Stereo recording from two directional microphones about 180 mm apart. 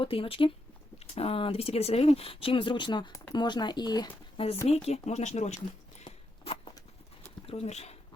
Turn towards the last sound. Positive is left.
turn(degrees=35)  # may be behind; listen again after turning